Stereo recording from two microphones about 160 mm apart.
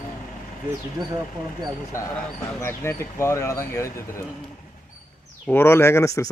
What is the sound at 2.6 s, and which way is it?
Speech, 15° left (ahead or behind).